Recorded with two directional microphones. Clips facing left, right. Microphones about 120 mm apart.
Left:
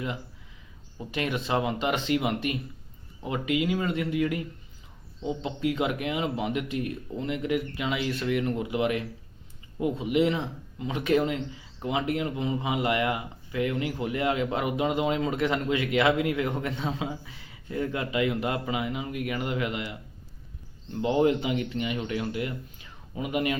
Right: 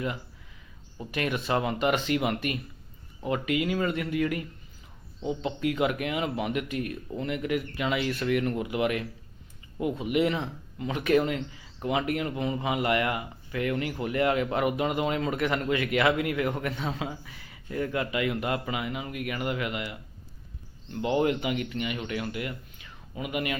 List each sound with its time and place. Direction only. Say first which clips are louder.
1.1 s speech: even; 20° left (ahead or behind)